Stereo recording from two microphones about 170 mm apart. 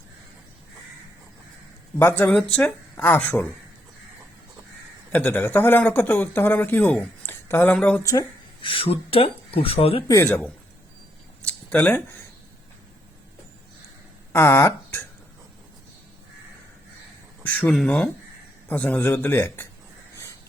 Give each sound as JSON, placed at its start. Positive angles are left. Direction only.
{"t": 2.0, "sound": "speech", "side_deg": 10}
{"t": 5.1, "sound": "speech", "side_deg": 10}
{"t": 8.6, "sound": "speech", "side_deg": 30}
{"t": 10.1, "sound": "speech", "side_deg": 15}
{"t": 11.4, "sound": "a sound", "side_deg": 10}
{"t": 14.3, "sound": "speech", "side_deg": 15}
{"t": 17.4, "sound": "speech", "side_deg": 10}